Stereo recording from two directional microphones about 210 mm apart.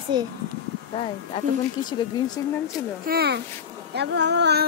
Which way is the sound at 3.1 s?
50° right (ahead or behind).